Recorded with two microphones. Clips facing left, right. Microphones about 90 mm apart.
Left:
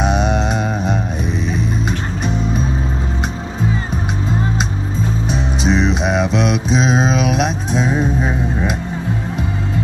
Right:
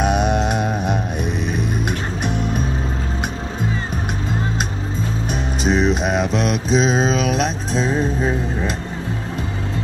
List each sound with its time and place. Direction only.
0.1 s music: 55° right (ahead or behind)
0.4 s mantra: 5° right (ahead or behind)
1.5 s music: 60° right (ahead or behind)
5.7 s music: 5° right (ahead or behind)
6.2 s mantra: 40° right (ahead or behind)
6.7 s mantra: 5° left (ahead or behind)
7.3 s music: 5° left (ahead or behind)